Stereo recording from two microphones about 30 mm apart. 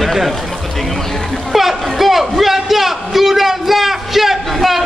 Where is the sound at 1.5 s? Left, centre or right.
Centre.